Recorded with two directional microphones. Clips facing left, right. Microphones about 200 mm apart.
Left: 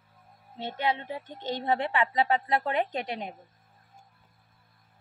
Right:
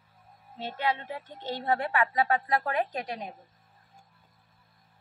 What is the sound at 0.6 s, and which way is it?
A woman's voice, 20° left (ahead or behind).